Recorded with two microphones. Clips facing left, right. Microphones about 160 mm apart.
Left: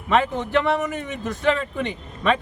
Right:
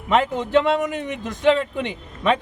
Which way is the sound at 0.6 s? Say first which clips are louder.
Right 2 dB; 20° right (ahead or behind).